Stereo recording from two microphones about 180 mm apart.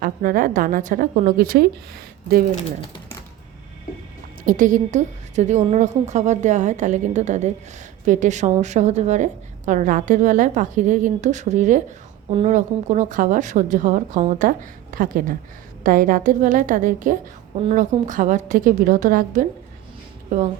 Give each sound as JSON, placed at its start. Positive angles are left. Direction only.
{"t": 0.0, "sound": "a woman's voice", "side_deg": -50}
{"t": 4.4, "sound": "a woman's voice", "side_deg": -45}